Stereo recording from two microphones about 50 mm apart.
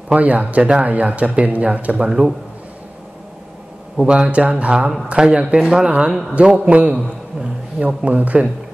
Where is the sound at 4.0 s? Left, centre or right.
Centre.